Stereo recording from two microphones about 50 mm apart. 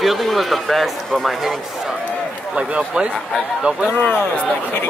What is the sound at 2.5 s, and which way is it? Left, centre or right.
Speech, right.